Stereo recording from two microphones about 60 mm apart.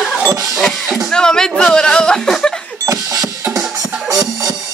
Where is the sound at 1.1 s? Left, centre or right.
Centre.